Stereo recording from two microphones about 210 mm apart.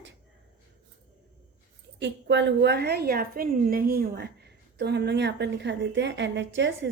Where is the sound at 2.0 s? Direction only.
55° right (ahead or behind).